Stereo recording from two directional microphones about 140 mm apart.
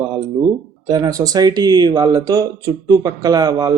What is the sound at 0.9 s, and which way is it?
Speech, 25° right (ahead or behind).